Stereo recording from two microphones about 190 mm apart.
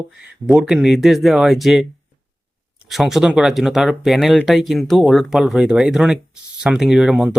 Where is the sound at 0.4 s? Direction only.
5° right (ahead or behind).